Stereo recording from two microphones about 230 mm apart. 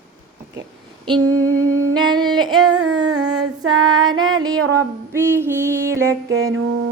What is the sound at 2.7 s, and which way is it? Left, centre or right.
Female singing, right.